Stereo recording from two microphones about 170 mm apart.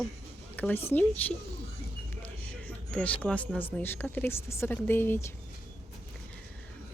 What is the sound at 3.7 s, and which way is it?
Speech, 10° left (ahead or behind).